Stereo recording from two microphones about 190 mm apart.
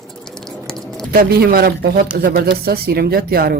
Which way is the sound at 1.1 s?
50° right (ahead or behind).